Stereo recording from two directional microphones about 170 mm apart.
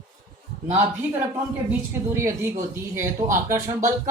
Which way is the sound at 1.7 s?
15° right (ahead or behind).